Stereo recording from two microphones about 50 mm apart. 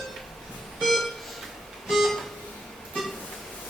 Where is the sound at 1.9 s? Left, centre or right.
Centre.